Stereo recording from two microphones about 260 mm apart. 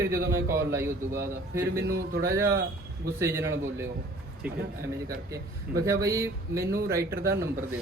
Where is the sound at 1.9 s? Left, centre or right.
Right.